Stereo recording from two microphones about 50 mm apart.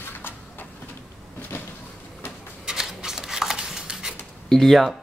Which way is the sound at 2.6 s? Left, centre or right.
Centre.